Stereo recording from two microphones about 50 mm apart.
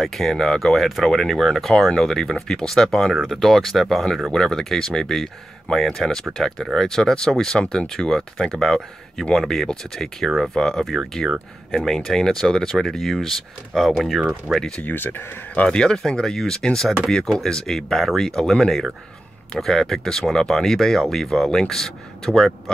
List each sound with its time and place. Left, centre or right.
0.0 s speech: centre
14.5 s speech: centre
14.8 s speech: left
15.6 s speech: centre